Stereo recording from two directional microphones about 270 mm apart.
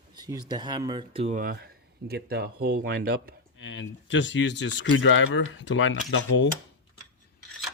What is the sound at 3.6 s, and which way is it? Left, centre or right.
Speech, left.